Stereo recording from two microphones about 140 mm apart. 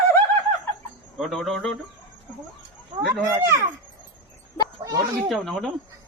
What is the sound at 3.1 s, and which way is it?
Speech, 20° right (ahead or behind).